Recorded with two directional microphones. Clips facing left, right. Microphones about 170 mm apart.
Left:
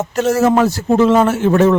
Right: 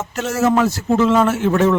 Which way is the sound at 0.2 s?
35° left (ahead or behind).